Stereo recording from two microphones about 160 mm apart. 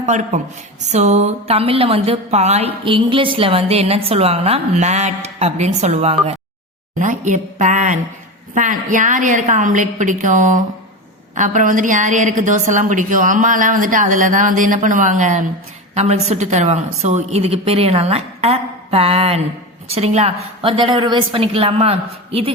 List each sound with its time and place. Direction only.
0.0 s a man's voice: 45° right (ahead or behind)